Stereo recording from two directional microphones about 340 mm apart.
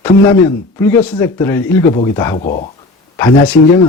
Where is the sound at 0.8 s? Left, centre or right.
Centre.